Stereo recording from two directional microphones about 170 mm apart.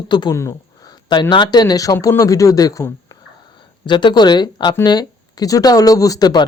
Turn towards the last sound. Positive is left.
turn(degrees=25)  # may be behind; listen again after turning